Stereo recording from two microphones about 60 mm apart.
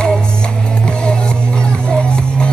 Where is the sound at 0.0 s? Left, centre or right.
Centre.